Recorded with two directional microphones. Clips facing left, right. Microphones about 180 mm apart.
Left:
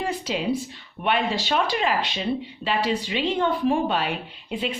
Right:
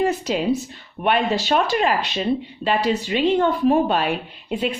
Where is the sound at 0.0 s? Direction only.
45° right (ahead or behind).